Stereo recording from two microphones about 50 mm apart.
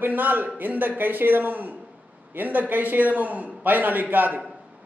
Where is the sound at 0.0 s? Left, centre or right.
Right.